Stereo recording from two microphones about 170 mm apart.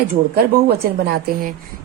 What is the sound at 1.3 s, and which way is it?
Speech, 55° right (ahead or behind).